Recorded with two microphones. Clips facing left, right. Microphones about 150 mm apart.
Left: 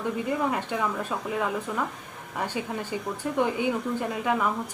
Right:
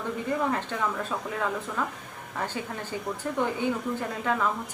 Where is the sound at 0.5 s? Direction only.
15° left (ahead or behind).